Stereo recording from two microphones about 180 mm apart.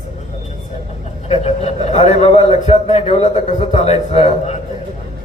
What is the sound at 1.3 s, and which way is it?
A man's voice, 35° left (ahead or behind).